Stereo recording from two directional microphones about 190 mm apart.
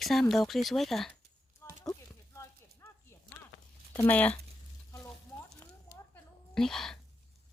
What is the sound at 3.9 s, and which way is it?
Speech, 10° left (ahead or behind).